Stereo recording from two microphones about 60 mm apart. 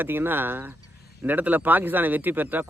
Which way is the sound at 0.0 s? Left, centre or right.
Right.